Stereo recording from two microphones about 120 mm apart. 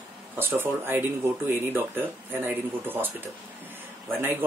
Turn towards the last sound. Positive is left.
turn(degrees=-15)  # may be behind; listen again after turning